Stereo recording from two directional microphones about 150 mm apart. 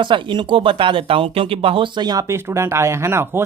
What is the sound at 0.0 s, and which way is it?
Speech, 30° right (ahead or behind).